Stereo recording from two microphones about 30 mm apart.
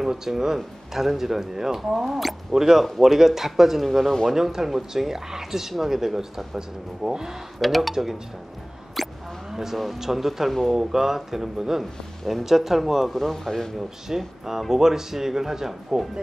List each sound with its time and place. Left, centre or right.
0.0 s speech: centre
2.0 s speech: centre
2.5 s speech: centre
4.3 s speech: centre
7.6 s speech: centre
7.9 s speech: centre
9.0 s a sound: centre
9.5 s speech: centre
11.8 s speech: centre
13.1 s a man's voice: centre
14.0 s speech: centre